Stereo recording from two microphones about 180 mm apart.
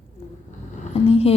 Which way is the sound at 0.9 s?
35° left (ahead or behind).